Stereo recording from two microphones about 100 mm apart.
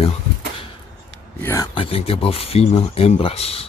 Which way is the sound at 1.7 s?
70° left (ahead or behind).